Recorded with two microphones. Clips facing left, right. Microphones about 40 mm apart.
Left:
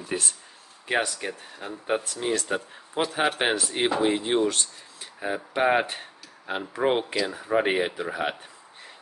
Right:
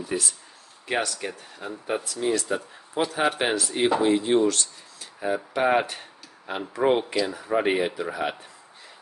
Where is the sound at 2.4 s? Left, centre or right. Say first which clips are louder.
Even; left.